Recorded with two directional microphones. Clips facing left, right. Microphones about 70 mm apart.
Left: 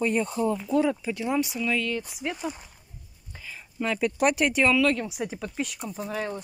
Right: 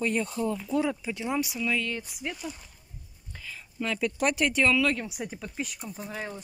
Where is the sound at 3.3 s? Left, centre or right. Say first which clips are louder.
Left 1 dB; centre.